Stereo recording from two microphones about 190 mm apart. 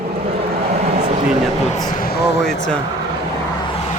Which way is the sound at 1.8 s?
50° left (ahead or behind).